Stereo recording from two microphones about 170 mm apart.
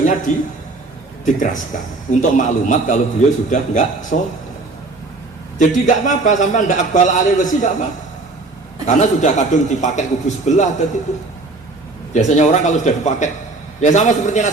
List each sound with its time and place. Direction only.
0.0 s a man's voice: 50° left (ahead or behind)
5.5 s a man's voice: 45° left (ahead or behind)
9.0 s a man's voice: 45° left (ahead or behind)
12.1 s a man's voice: 45° left (ahead or behind)